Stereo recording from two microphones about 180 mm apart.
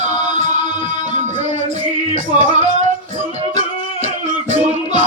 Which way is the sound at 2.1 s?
45° right (ahead or behind).